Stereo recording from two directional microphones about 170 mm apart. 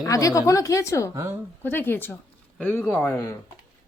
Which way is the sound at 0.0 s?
20° left (ahead or behind).